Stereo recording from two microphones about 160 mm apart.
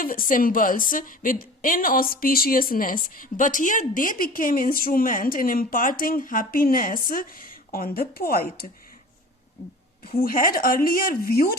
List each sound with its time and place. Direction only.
0.0 s a woman's voice: 60° left (ahead or behind)
10.2 s a woman's voice: 60° left (ahead or behind)